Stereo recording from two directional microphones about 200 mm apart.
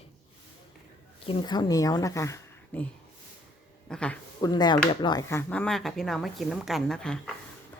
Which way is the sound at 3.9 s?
5° left (ahead or behind).